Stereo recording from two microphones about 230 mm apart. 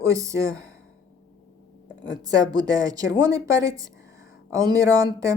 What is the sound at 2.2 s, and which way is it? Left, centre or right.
A woman's voice, centre.